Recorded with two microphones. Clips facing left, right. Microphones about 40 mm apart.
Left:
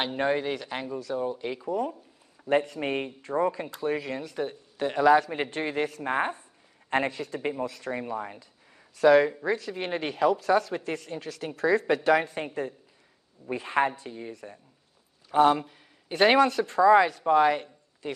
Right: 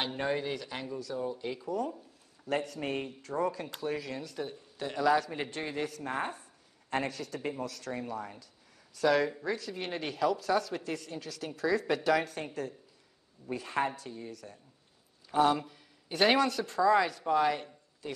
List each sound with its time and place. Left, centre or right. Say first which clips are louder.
0.0 s a man's voice: left 6 dB; left
13.5 s a man's voice: left 6 dB; left